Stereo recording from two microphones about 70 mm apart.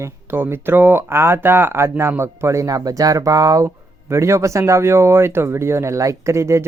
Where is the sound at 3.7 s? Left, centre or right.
Right.